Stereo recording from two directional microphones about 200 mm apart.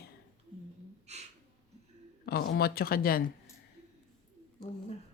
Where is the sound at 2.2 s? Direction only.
50° left (ahead or behind).